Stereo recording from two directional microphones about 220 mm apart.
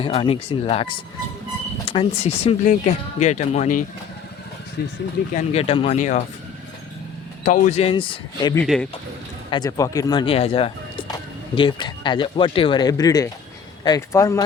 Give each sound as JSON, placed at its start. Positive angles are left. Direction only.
{"t": 0.0, "sound": "speech", "side_deg": 25}
{"t": 5.3, "sound": "speech", "side_deg": 30}
{"t": 7.4, "sound": "speech", "side_deg": 35}
{"t": 8.6, "sound": "speech", "side_deg": 0}
{"t": 9.5, "sound": "speech", "side_deg": 15}